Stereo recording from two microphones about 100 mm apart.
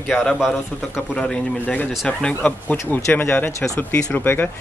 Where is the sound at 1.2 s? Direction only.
10° left (ahead or behind).